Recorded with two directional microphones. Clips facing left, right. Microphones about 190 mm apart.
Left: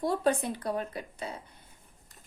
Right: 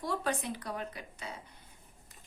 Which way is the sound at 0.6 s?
30° left (ahead or behind).